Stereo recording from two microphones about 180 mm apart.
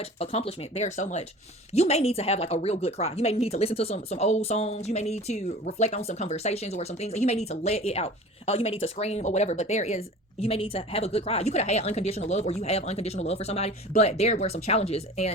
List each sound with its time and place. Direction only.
0.0 s speech: 35° left (ahead or behind)